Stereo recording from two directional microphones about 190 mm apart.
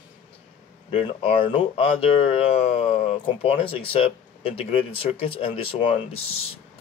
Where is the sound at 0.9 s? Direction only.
30° left (ahead or behind).